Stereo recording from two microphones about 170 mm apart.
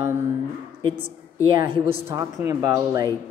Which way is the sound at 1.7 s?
30° right (ahead or behind).